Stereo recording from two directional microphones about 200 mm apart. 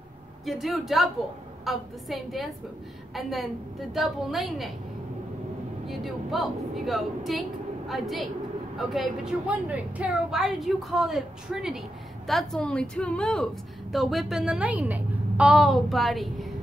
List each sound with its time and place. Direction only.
0.5 s a woman's voice: centre (ahead or behind)
5.9 s a woman's voice: centre (ahead or behind)